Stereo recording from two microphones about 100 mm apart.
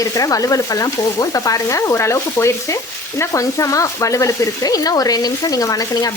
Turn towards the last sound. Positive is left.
turn(degrees=35)  # may be behind; listen again after turning